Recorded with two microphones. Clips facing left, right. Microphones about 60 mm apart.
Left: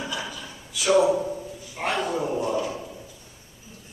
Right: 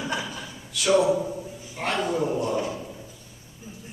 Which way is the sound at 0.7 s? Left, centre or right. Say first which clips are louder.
Left 1 dB; centre.